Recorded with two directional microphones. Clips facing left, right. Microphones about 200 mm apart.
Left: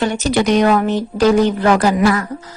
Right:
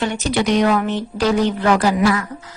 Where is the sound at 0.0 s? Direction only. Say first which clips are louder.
Left 3 dB; 45° left (ahead or behind).